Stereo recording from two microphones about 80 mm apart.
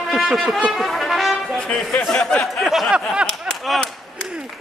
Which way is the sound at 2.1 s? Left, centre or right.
Centre.